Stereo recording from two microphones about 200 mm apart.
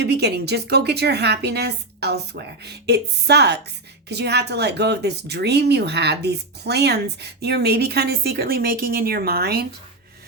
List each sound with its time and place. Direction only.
0.0 s speech: 55° right (ahead or behind)